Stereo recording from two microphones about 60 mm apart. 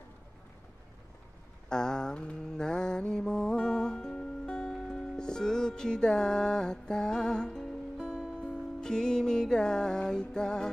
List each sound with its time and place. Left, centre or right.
1.7 s mantra: centre
8.4 s music: centre